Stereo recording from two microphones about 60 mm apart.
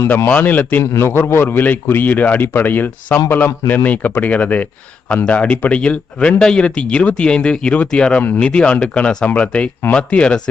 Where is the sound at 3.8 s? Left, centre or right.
Left.